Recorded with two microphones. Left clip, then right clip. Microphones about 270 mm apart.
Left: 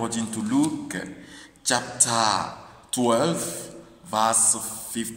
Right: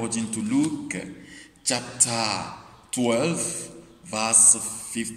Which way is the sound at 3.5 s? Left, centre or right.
Left.